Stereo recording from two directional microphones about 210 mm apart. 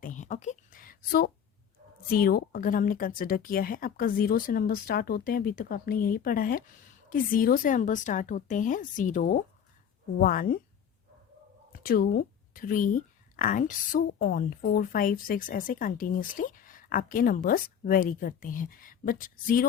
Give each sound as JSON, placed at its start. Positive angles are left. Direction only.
{"t": 0.0, "sound": "a sound", "side_deg": 35}
{"t": 2.0, "sound": "a woman's voice", "side_deg": 45}
{"t": 11.7, "sound": "a woman's voice", "side_deg": 45}